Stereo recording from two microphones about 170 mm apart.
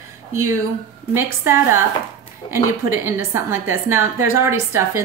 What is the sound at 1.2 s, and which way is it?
Speech, 15° right (ahead or behind).